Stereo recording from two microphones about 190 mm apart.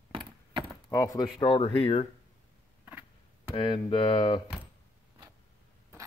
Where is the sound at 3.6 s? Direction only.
30° left (ahead or behind).